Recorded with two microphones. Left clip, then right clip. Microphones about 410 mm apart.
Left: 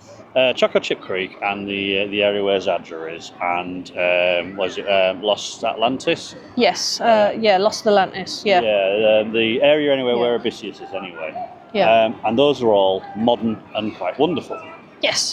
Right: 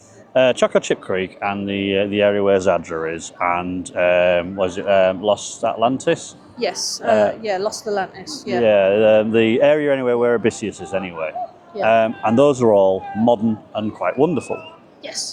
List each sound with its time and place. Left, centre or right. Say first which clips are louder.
0.3 s speech: right 1 dB; right
6.6 s speech: left 5 dB; left
8.6 s speech: right 3 dB; right